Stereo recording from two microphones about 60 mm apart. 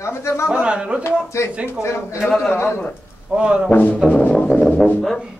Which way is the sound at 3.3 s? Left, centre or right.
Right.